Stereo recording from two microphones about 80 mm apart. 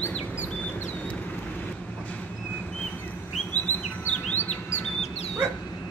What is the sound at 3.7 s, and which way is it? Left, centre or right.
Chirp, left.